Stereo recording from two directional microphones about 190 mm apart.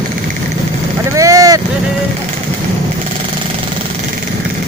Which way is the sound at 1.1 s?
15° right (ahead or behind).